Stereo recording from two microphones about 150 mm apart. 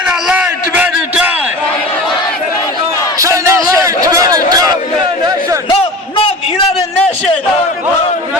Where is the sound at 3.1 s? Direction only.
20° right (ahead or behind).